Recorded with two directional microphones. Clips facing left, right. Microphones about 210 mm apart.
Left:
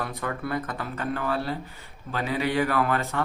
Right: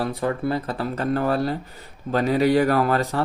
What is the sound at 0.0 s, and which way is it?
Speech, 30° right (ahead or behind).